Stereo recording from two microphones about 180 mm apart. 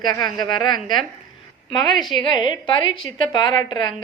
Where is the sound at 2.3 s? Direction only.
25° left (ahead or behind).